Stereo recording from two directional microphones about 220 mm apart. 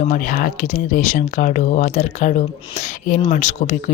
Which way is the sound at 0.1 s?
40° left (ahead or behind).